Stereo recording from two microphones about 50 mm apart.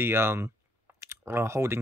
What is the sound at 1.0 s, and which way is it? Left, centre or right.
Speech, right.